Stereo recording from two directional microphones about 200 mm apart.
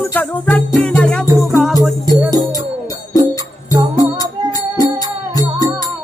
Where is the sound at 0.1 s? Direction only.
10° left (ahead or behind).